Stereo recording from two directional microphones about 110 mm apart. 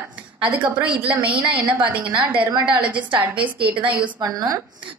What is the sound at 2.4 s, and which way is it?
Speech, 15° right (ahead or behind).